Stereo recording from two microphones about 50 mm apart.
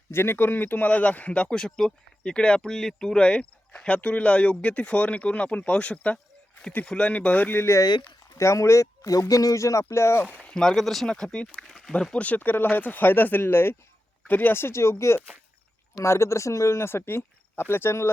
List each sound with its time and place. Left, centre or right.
0.1 s speech: left
0.9 s speech: left
7.5 s speech: left
8.4 s speech: left
10.4 s speech: centre
12.1 s speech: left
14.3 s speech: left
14.5 s speech: left